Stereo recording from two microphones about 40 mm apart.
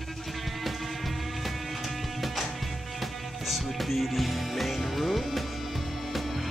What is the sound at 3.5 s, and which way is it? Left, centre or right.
Music, centre.